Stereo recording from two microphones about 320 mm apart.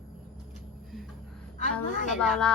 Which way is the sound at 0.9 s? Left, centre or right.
Centre.